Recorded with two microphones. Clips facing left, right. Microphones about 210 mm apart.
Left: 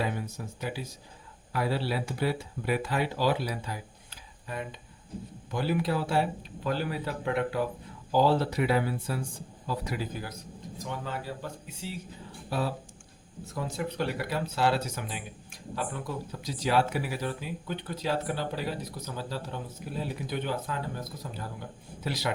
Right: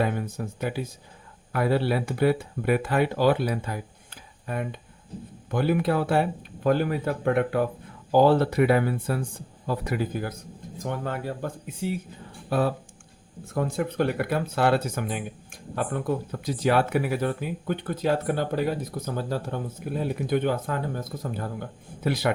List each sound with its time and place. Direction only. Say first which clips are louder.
0.0 s speech: right 6 dB; 55° right (ahead or behind)